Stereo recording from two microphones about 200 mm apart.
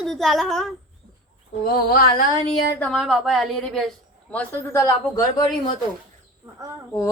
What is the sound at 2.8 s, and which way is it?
A woman's voice, 5° left (ahead or behind).